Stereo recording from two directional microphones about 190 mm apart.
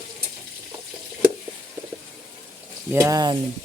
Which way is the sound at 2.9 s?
15° right (ahead or behind).